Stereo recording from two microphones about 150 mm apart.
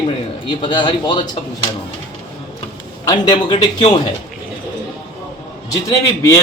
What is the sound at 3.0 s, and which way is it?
Speech, 25° left (ahead or behind).